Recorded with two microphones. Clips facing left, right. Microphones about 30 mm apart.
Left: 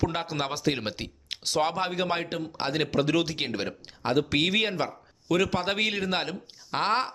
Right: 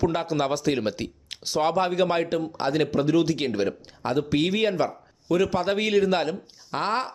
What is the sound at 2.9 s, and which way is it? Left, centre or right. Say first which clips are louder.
Speech: right 2 dB; left.